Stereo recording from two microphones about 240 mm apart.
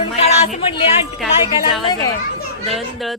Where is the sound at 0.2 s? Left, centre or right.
Left.